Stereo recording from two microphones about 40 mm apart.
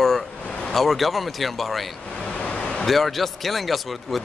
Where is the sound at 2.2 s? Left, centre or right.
Left.